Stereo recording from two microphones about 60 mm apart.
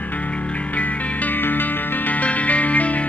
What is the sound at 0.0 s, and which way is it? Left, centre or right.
Music, left.